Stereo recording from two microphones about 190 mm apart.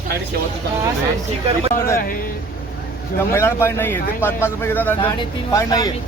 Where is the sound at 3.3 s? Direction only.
15° left (ahead or behind).